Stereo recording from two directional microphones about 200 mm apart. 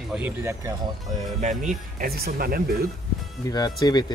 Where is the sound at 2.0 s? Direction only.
50° right (ahead or behind).